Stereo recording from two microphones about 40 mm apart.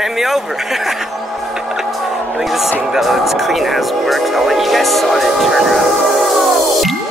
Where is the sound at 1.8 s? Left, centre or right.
Centre.